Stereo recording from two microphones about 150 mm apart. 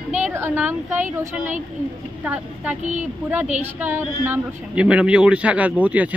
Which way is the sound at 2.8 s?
55° right (ahead or behind).